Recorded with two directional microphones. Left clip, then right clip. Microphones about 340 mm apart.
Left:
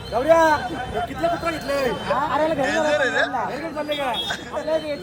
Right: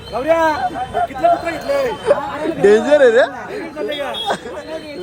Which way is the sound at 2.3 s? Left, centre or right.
Centre.